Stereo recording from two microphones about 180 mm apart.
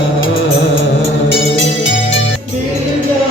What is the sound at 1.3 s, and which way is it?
Music, 90° left.